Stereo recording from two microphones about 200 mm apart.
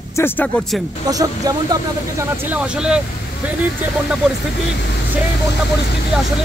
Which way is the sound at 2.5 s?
5° right (ahead or behind).